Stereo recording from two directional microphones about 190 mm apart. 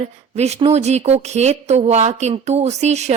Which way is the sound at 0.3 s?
35° right (ahead or behind).